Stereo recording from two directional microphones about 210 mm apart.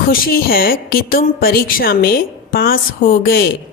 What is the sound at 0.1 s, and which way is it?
A woman's voice, 45° left (ahead or behind).